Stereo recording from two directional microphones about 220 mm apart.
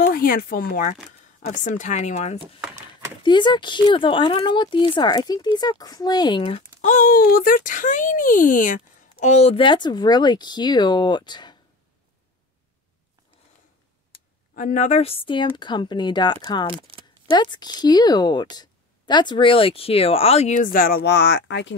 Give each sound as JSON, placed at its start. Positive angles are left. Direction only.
{"t": 0.0, "sound": "speech", "side_deg": 45}
{"t": 3.3, "sound": "speech", "side_deg": 20}
{"t": 14.5, "sound": "speech", "side_deg": 35}
{"t": 16.7, "sound": "speech", "side_deg": -25}
{"t": 17.3, "sound": "speech", "side_deg": 20}